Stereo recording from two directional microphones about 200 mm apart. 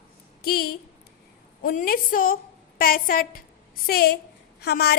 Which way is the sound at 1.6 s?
45° left (ahead or behind).